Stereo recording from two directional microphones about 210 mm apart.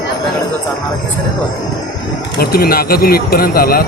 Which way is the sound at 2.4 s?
45° left (ahead or behind).